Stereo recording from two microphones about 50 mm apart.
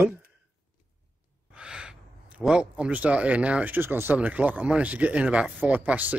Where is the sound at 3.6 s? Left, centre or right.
Right.